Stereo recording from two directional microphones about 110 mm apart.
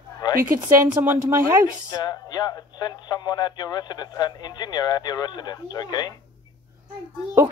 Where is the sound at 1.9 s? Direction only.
40° left (ahead or behind).